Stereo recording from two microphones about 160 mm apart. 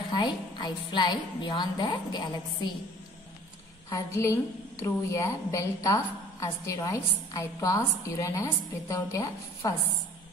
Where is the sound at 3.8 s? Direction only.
20° left (ahead or behind).